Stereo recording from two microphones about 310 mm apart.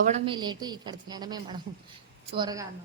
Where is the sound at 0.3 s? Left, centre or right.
Centre.